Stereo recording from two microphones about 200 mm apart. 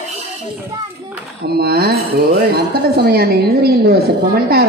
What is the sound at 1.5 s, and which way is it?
A man's voice, 50° right (ahead or behind).